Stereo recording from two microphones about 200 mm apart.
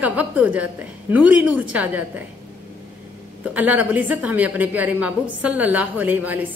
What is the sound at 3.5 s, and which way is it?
A woman's voice, 5° right (ahead or behind).